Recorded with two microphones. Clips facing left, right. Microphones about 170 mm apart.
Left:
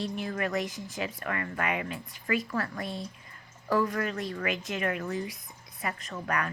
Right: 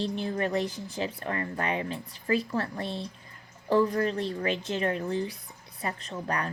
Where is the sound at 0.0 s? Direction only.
30° right (ahead or behind).